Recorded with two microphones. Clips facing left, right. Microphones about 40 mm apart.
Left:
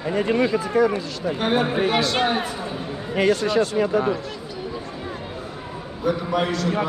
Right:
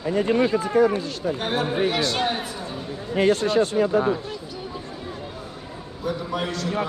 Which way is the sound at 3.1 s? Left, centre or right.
Left.